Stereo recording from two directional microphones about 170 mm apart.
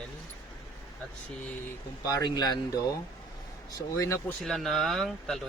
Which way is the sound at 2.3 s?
25° left (ahead or behind).